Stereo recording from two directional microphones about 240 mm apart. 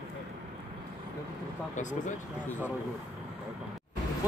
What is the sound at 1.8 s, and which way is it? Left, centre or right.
Speech, left.